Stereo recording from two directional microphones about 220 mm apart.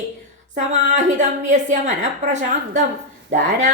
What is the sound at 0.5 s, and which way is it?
A woman's voice, 35° right (ahead or behind).